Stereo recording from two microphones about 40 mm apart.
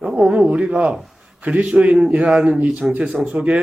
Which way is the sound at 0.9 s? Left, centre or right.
Centre.